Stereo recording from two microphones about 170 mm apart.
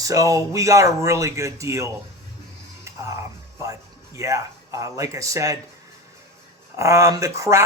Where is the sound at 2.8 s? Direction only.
15° right (ahead or behind).